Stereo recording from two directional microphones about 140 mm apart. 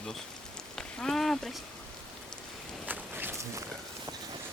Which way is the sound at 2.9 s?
15° right (ahead or behind).